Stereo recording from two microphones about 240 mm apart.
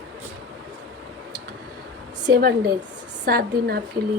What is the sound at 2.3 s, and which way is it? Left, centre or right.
A woman's voice, right.